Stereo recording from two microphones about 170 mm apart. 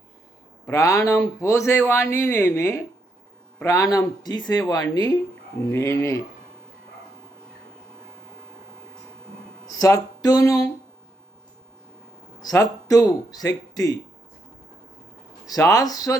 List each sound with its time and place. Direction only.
0.6 s speech: 20° left (ahead or behind)
9.7 s speech: 20° left (ahead or behind)
12.4 s speech: 20° left (ahead or behind)
15.4 s speech: 20° left (ahead or behind)